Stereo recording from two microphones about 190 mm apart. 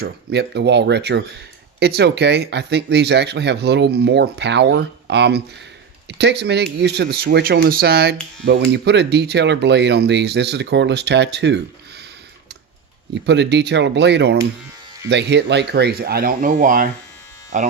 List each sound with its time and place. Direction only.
0.0 s speech: 60° right (ahead or behind)
13.1 s speech: 65° right (ahead or behind); by 17.7 s 40° right (ahead or behind)